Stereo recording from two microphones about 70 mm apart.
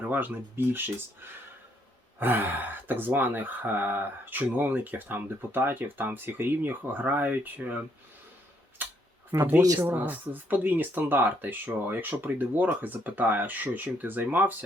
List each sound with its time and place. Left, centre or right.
0.0 s speech: right
8.8 s tick-tock: right
9.6 s speech: right
9.9 s speech: right